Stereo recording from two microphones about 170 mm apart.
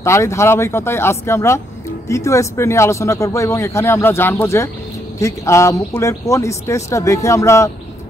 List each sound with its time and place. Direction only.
0.0 s a man's voice: 15° left (ahead or behind)